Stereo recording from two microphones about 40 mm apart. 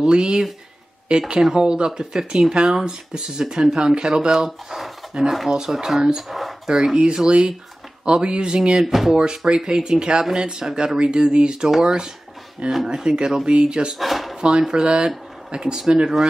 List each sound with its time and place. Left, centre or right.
0.0 s speech: right
4.6 s a sound: centre
5.5 s speech: centre
6.3 s a sound: centre
6.7 s speech: centre
8.8 s speech: centre
9.1 s speech: right
13.9 s speech: centre
14.6 s speech: centre